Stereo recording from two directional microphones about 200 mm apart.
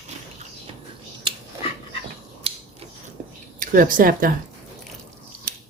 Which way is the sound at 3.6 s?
45° right (ahead or behind).